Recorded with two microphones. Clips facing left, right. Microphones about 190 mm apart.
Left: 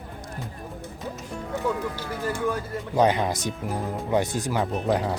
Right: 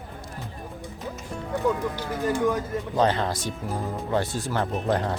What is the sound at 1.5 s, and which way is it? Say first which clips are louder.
Speech: right 2 dB; 15° right (ahead or behind).